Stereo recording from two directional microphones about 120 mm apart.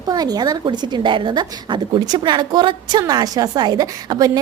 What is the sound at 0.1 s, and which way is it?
A woman's voice, 35° right (ahead or behind).